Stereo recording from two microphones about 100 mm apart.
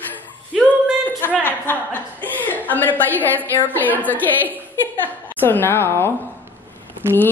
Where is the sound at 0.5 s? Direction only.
Centre (ahead or behind).